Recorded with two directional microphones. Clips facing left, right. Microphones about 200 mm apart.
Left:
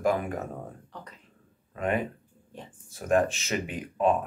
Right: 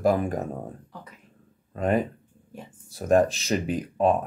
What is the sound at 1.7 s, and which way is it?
Speech, 35° right (ahead or behind).